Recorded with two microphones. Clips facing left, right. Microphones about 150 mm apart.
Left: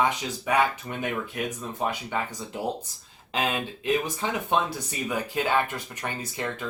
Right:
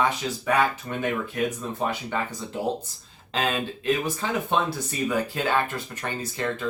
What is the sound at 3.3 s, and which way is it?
Speech, 15° left (ahead or behind).